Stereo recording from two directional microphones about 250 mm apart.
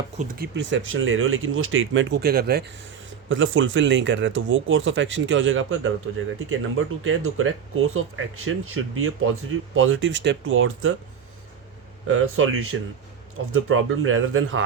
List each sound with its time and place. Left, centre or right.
0.2 s speech: right
3.2 s speech: right
12.0 s speech: right